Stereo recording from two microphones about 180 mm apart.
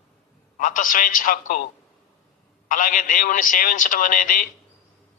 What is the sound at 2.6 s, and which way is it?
A man's voice, 50° left (ahead or behind).